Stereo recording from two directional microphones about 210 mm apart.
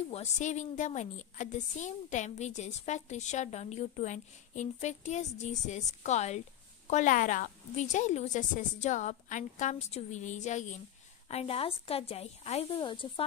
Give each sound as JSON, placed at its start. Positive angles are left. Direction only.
{"t": 0.1, "sound": "a woman's voice", "side_deg": 35}